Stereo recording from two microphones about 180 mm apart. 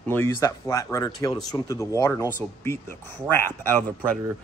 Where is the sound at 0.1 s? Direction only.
15° left (ahead or behind).